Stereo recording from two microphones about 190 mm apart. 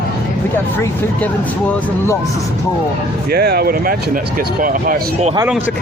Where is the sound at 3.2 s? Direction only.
55° right (ahead or behind).